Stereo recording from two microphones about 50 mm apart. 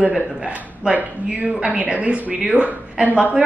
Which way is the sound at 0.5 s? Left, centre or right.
Right.